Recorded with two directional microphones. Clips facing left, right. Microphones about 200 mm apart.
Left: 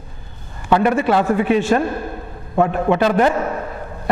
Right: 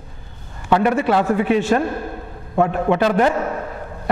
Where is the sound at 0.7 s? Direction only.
15° left (ahead or behind).